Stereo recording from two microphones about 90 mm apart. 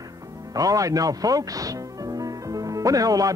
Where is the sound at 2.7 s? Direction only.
40° right (ahead or behind).